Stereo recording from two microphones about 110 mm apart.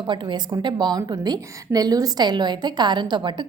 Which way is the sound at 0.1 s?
45° right (ahead or behind).